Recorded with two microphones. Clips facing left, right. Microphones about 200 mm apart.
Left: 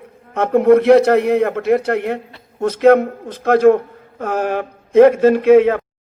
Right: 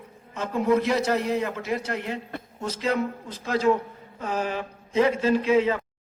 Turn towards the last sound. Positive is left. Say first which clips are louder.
# left 10 dB
turn(degrees=60)  # may be behind; listen again after turning